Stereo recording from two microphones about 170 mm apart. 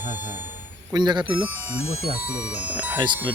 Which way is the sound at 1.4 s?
10° right (ahead or behind).